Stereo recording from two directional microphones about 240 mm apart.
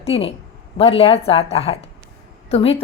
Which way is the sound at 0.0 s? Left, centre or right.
Left.